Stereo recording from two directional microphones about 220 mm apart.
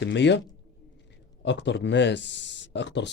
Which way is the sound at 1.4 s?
55° left (ahead or behind).